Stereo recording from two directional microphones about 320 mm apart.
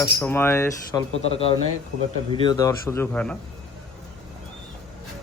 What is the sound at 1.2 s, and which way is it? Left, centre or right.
A man's voice, centre.